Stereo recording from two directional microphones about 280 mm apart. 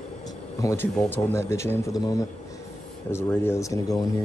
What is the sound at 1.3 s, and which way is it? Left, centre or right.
A man's voice, centre.